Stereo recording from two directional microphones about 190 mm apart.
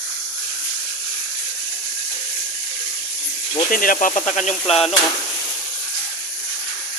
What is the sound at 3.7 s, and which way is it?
Speech, 45° left (ahead or behind).